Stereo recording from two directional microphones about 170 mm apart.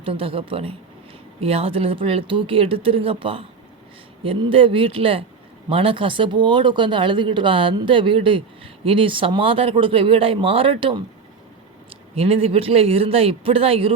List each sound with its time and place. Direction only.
0.0 s speech: 35° right (ahead or behind)
12.1 s speech: 35° right (ahead or behind)